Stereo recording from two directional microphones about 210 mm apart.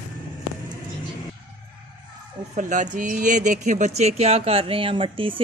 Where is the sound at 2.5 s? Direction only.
35° right (ahead or behind).